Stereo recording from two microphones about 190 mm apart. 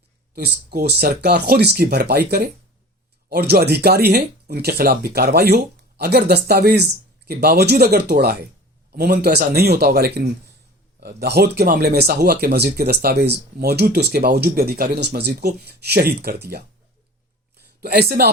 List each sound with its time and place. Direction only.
0.3 s speech: 55° right (ahead or behind)
17.7 s speech: 55° right (ahead or behind)